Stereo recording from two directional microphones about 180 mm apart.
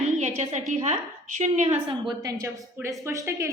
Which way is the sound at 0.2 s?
40° right (ahead or behind).